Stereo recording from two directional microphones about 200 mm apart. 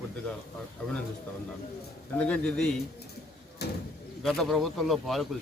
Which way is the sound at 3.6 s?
55° left (ahead or behind).